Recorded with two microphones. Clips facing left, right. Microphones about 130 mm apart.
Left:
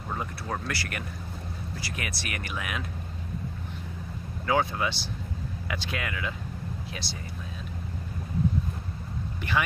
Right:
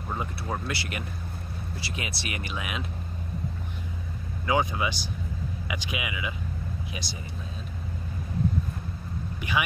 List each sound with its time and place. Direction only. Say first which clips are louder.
0.1 s speech: right 1 dB; 10° right (ahead or behind)
0.7 s speech: right 1 dB; 20° right (ahead or behind)
4.5 s speech: even; 10° right (ahead or behind)